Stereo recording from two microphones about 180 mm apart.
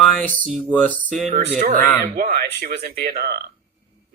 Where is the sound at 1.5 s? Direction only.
45° right (ahead or behind).